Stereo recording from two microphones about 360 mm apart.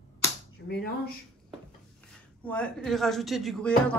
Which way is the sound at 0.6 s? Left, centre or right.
Left.